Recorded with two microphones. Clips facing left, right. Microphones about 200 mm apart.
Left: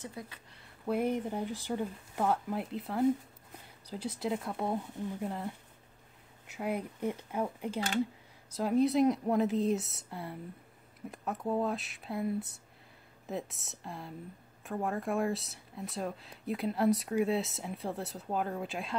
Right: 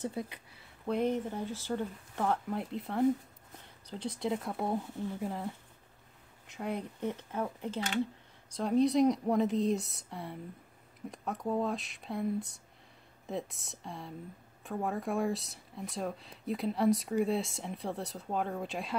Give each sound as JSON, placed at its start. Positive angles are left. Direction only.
{"t": 0.2, "sound": "speech", "side_deg": -25}
{"t": 0.8, "sound": "speech", "side_deg": 10}